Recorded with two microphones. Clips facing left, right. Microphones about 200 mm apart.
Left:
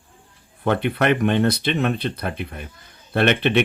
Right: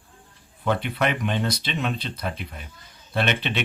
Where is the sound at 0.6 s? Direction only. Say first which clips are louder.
Left 4 dB; 55° left (ahead or behind).